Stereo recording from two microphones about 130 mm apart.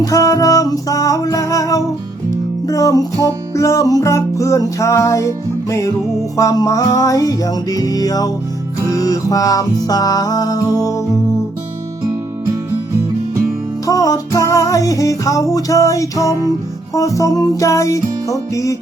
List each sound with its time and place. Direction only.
0.0 s music: 25° left (ahead or behind)
13.8 s music: 25° left (ahead or behind)